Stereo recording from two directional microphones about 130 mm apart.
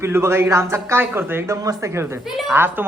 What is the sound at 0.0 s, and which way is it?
Speech, 20° right (ahead or behind).